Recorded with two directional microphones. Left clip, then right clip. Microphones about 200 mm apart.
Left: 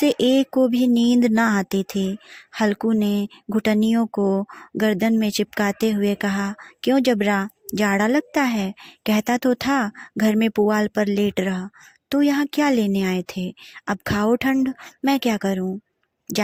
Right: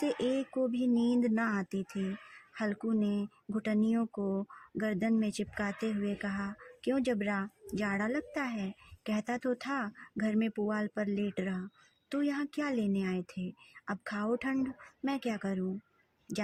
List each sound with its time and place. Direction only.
0.0 s speech: 40° left (ahead or behind)